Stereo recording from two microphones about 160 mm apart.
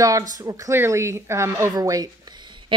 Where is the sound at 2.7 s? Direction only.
30° right (ahead or behind).